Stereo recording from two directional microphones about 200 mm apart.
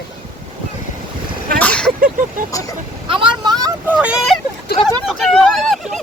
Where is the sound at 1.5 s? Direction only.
5° left (ahead or behind).